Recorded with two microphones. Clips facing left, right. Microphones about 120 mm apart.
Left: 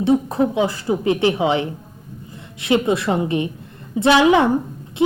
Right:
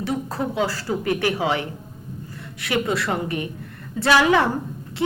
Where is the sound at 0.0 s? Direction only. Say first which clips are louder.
Left 8 dB; 20° left (ahead or behind).